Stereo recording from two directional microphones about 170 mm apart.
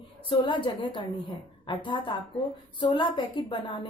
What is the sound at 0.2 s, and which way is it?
A woman's voice, 30° left (ahead or behind).